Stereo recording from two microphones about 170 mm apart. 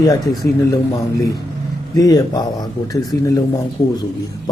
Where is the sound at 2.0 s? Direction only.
20° left (ahead or behind).